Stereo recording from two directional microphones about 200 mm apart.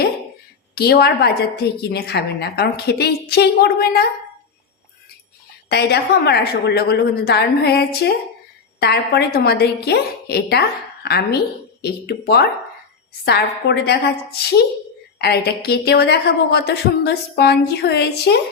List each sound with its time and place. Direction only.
0.8 s a woman's voice: 50° left (ahead or behind)
5.6 s a woman's voice: 55° left (ahead or behind)